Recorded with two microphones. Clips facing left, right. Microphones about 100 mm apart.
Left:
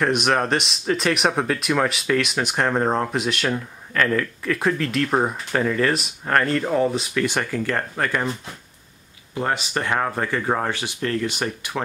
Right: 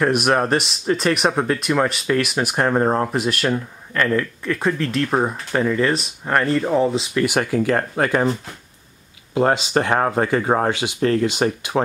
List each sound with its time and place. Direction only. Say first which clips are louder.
0.0 s speech: right 3 dB; 5° right (ahead or behind)
7.2 s speech: right 5 dB; 10° right (ahead or behind)
9.4 s speech: right 6 dB; 25° right (ahead or behind)
10.1 s speech: right 5 dB; 20° right (ahead or behind)